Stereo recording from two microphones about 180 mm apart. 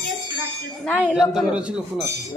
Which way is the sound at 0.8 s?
10° left (ahead or behind).